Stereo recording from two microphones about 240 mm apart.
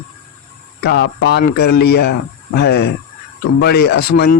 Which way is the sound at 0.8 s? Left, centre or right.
Left.